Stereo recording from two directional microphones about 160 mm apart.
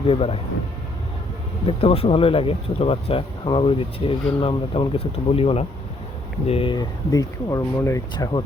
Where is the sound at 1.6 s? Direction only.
35° left (ahead or behind).